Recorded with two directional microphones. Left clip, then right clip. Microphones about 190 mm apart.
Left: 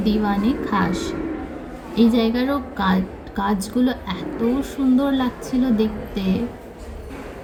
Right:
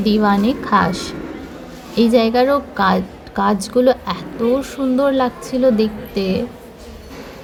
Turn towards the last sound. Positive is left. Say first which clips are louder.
# right 5 dB
turn(degrees=-35)  # may be behind; listen again after turning